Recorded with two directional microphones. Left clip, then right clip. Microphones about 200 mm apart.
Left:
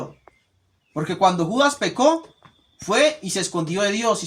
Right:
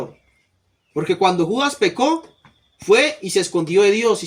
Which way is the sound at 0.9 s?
25° left (ahead or behind).